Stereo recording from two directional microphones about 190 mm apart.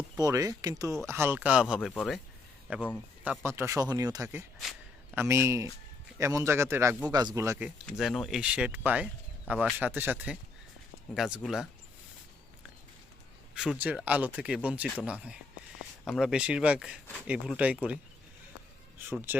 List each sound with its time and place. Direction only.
0.2 s a man's voice: 20° right (ahead or behind)
7.9 s speech: centre (ahead or behind)
13.5 s speech: 5° right (ahead or behind)